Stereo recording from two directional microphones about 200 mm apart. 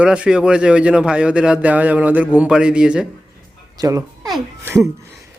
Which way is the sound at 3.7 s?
15° right (ahead or behind).